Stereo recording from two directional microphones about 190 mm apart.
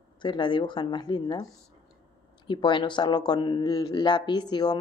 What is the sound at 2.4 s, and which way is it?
Speech, 25° left (ahead or behind).